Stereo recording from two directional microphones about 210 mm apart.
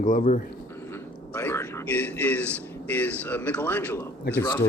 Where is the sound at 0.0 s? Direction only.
40° left (ahead or behind).